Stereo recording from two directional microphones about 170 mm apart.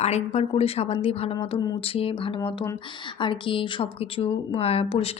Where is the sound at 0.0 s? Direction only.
40° left (ahead or behind).